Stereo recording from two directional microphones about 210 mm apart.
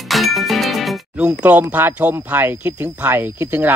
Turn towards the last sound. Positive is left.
turn(degrees=-10)  # may be behind; listen again after turning